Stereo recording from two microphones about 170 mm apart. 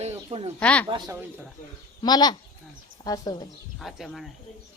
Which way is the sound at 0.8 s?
25° right (ahead or behind).